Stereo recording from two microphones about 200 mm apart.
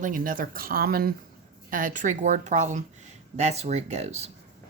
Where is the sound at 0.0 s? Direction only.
45° right (ahead or behind).